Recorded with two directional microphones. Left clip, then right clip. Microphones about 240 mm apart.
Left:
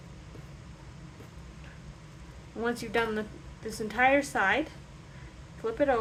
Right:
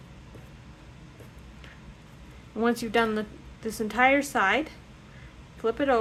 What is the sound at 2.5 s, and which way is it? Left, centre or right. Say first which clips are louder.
A woman's voice: right 5 dB; right.